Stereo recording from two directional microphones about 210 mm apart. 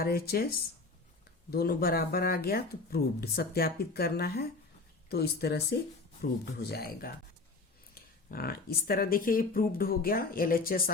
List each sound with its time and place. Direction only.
0.0 s speech: 45° left (ahead or behind)
1.5 s speech: 45° left (ahead or behind)
8.3 s speech: 45° left (ahead or behind)